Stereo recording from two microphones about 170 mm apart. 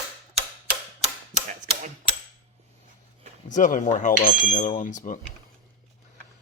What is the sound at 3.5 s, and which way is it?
Speech, 50° left (ahead or behind).